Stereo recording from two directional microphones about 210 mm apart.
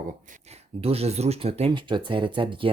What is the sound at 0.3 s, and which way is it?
Speech, 30° right (ahead or behind).